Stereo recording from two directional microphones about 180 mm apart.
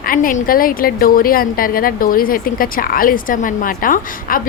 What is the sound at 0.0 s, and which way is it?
A woman's voice, 50° left (ahead or behind).